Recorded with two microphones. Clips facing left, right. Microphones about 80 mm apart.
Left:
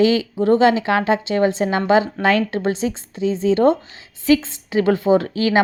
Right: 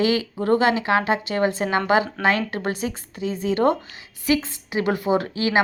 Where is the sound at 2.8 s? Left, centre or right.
Right.